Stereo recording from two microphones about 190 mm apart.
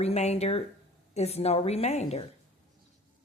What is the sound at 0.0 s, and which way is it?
A woman's voice, 35° left (ahead or behind).